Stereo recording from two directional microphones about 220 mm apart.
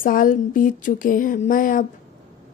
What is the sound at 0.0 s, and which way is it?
Speech, 40° left (ahead or behind).